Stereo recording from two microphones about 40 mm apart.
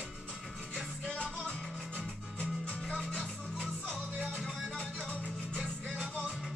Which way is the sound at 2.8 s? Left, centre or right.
Centre.